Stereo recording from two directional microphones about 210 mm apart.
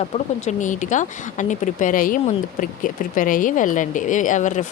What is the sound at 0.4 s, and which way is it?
Speech, 35° left (ahead or behind).